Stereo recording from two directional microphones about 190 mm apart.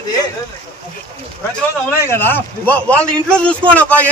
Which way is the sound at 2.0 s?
10° left (ahead or behind).